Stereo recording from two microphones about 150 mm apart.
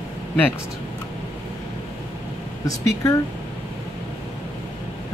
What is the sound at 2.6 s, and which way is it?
Speech, 20° left (ahead or behind).